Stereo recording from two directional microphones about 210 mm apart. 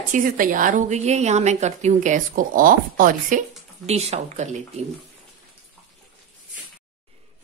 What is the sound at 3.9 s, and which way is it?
Speech, 30° right (ahead or behind).